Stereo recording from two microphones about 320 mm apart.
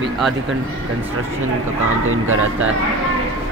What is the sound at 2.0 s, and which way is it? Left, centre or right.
Speech, right.